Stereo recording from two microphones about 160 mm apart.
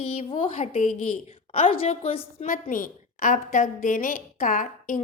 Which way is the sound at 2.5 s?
60° left (ahead or behind).